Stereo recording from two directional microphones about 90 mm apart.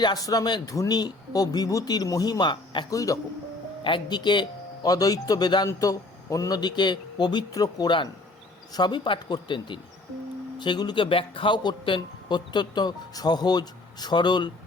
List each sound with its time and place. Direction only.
0.0 s a man's voice: 45° left (ahead or behind)
2.9 s speech: 40° left (ahead or behind)
3.8 s a man's voice: 65° left (ahead or behind)
5.6 s a man's voice: 40° left (ahead or behind); by 14.5 s 55° left (ahead or behind)